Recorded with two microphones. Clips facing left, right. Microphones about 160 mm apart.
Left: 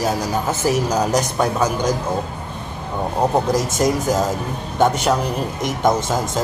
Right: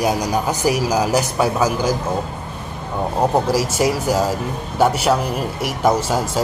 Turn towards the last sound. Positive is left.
turn(degrees=-10)  # may be behind; listen again after turning